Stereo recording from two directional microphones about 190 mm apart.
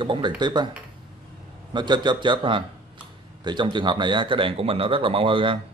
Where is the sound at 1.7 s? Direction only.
25° right (ahead or behind).